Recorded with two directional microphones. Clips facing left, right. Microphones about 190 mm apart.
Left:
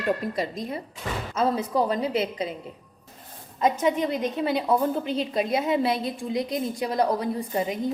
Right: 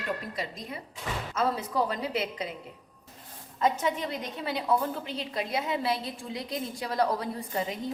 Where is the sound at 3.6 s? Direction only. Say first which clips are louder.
Left 5 dB; 20° left (ahead or behind).